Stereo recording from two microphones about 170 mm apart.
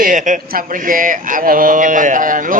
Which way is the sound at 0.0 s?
50° right (ahead or behind).